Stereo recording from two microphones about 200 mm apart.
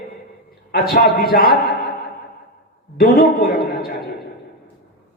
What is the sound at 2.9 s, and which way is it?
Speech, 50° left (ahead or behind).